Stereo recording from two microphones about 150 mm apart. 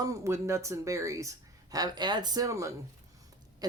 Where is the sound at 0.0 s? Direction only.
20° right (ahead or behind).